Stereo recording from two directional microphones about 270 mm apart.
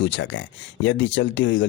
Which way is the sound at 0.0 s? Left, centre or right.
Left.